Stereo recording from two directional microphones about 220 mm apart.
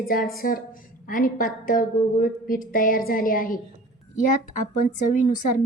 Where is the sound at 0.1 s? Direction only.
40° left (ahead or behind).